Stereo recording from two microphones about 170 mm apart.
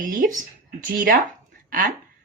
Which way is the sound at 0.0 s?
50° right (ahead or behind).